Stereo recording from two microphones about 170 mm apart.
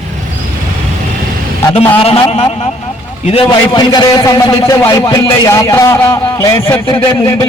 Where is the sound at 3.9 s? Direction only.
20° left (ahead or behind).